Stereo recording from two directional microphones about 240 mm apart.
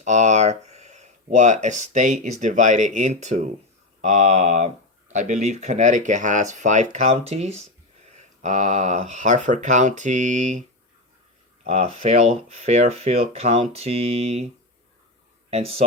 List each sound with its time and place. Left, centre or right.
0.0 s speech: right
11.6 s speech: right
15.4 s speech: right